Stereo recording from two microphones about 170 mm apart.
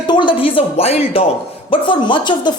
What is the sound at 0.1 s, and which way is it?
A woman's voice, 30° left (ahead or behind).